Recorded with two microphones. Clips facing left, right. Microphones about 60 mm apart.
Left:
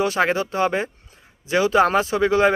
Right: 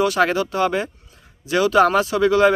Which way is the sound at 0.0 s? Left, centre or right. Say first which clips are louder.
Right 2 dB; left.